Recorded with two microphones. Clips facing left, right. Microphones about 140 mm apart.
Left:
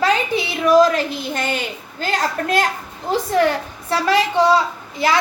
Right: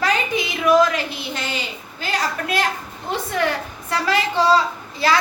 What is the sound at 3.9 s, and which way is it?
Speech, 25° left (ahead or behind).